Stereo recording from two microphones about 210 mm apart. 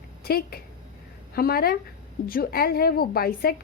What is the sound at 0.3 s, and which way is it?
A woman's voice, 45° left (ahead or behind).